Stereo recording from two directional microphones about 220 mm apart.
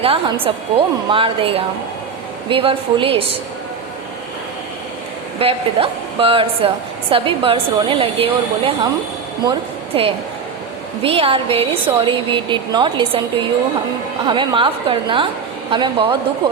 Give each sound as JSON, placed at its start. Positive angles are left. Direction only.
{"t": 0.0, "sound": "a woman's voice", "side_deg": -25}
{"t": 5.4, "sound": "a woman's voice", "side_deg": -25}
{"t": 14.3, "sound": "a woman's voice", "side_deg": -20}